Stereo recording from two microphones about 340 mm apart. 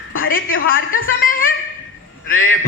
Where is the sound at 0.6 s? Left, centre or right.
Left.